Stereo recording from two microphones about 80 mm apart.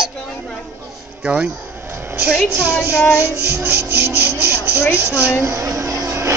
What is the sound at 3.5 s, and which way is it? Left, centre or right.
Rub, right.